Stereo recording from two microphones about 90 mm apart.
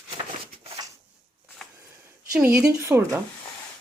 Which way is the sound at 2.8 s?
25° right (ahead or behind).